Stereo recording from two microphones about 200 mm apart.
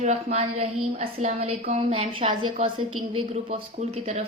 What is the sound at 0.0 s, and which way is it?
Speech, 35° right (ahead or behind).